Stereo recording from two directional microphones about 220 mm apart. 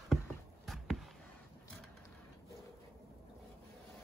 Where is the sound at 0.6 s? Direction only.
Centre (ahead or behind).